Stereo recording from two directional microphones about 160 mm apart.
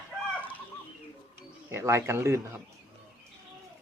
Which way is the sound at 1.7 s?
15° right (ahead or behind).